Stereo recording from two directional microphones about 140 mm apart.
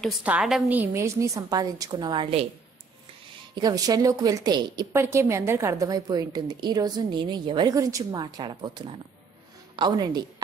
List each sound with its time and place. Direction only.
0.2 s a woman's voice: 5° right (ahead or behind)
0.9 s a woman's voice: 20° right (ahead or behind)
3.5 s a woman's voice: 30° right (ahead or behind)
4.9 s a woman's voice: 20° right (ahead or behind)